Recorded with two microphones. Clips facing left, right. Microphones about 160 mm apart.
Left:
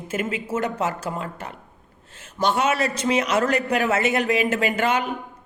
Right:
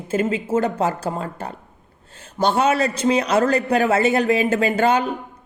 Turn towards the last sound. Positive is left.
turn(degrees=-30)  # may be behind; listen again after turning